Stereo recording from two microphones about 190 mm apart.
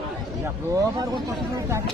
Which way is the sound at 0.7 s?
20° right (ahead or behind).